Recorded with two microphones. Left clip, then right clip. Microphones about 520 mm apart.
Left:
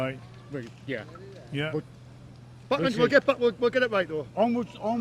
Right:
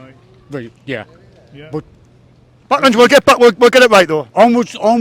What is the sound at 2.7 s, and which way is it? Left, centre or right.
A man's voice, right.